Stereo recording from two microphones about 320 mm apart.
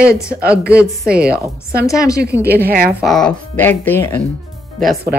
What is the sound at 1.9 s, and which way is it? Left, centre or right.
Speech, centre.